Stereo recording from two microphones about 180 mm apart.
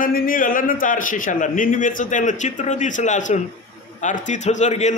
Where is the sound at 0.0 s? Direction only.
50° left (ahead or behind).